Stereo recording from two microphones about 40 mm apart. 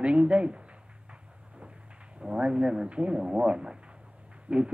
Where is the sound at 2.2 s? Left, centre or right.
Right.